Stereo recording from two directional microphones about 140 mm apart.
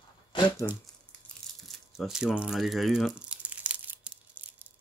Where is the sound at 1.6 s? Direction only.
Centre (ahead or behind).